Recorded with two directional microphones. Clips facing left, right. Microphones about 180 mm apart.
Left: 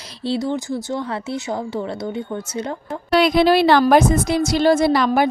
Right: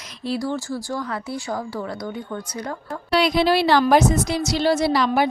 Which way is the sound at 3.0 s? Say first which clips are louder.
Left 4 dB; 50° left (ahead or behind).